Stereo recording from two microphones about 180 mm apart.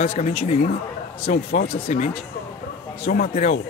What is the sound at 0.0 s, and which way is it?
Speech, 35° left (ahead or behind).